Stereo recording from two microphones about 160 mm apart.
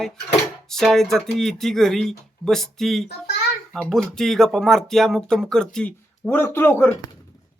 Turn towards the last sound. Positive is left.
turn(degrees=10)  # may be behind; listen again after turning